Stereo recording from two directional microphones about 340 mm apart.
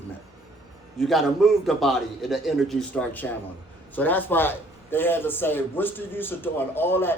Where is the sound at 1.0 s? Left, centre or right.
Centre.